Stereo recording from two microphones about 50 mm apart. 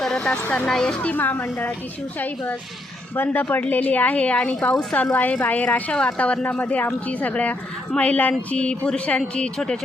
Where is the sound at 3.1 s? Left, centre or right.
Left.